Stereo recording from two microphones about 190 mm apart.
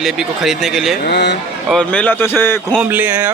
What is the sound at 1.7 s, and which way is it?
A man's voice, 5° left (ahead or behind).